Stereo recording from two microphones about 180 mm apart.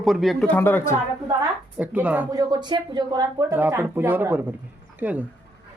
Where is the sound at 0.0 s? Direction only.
Centre (ahead or behind).